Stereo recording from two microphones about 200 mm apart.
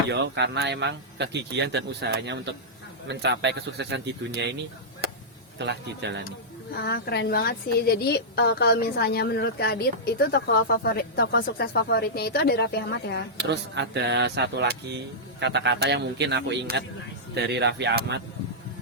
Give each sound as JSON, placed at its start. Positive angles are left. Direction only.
{"t": 0.1, "sound": "speech", "side_deg": -60}
{"t": 5.0, "sound": "a sound", "side_deg": -50}
{"t": 5.5, "sound": "speech", "side_deg": -60}
{"t": 6.8, "sound": "a woman's voice", "side_deg": 55}
{"t": 13.3, "sound": "speech", "side_deg": -60}